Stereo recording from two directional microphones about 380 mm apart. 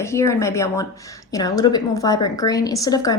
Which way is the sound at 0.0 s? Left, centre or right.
Centre.